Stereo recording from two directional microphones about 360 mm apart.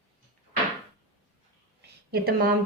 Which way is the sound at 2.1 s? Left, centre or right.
Right.